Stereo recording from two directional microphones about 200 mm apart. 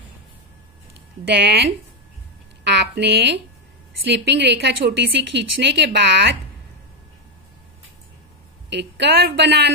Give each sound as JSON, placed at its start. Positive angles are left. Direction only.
{"t": 1.3, "sound": "a woman's voice", "side_deg": -55}
{"t": 2.6, "sound": "a sound", "side_deg": -55}
{"t": 4.1, "sound": "a woman's voice", "side_deg": -60}
{"t": 8.6, "sound": "a woman's voice", "side_deg": -60}